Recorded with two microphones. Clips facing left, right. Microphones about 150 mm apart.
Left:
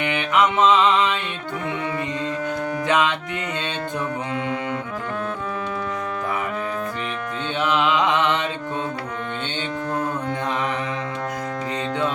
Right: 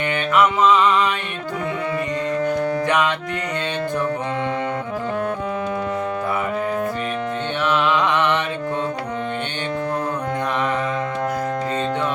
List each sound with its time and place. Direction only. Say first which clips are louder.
0.1 s music: right 3 dB; 15° left (ahead or behind)
2.8 s music: left 2 dB; 20° left (ahead or behind)
7.6 s mantra: even; 15° left (ahead or behind)